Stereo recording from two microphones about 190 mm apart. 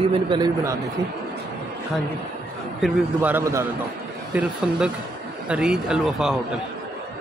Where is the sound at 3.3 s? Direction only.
15° right (ahead or behind).